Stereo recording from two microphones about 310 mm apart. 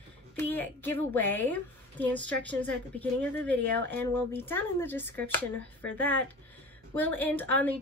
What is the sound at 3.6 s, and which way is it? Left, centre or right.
Speech, right.